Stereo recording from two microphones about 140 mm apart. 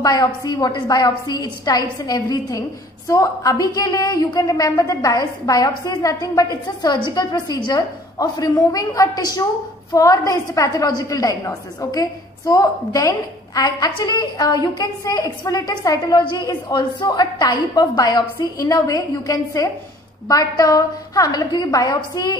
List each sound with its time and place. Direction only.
0.0 s a woman's voice: 25° left (ahead or behind)